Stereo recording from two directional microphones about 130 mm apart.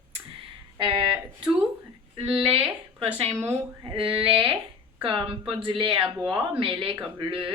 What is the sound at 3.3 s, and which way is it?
Speech, 20° right (ahead or behind).